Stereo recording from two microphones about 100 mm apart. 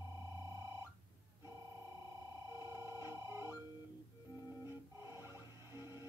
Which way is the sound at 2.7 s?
30° right (ahead or behind).